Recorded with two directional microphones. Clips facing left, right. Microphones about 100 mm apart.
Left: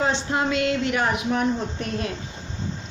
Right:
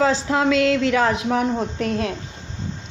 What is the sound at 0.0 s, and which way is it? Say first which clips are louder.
A woman's voice: right 5 dB; 90° right.